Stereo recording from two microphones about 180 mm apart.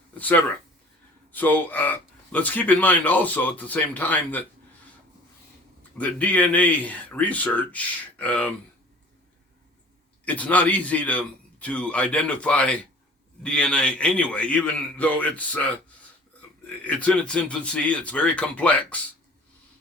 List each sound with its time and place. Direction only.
0.2 s speech: 10° left (ahead or behind)
6.0 s speech: 10° left (ahead or behind)
10.2 s a man's voice: 10° left (ahead or behind)
16.8 s speech: 10° left (ahead or behind)